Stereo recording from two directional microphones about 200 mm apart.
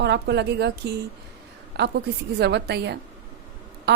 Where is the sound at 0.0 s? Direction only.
55° right (ahead or behind).